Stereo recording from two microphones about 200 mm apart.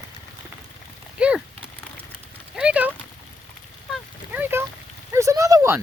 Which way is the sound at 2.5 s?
5° right (ahead or behind).